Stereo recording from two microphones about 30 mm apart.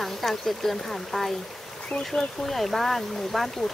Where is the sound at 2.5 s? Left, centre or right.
Centre.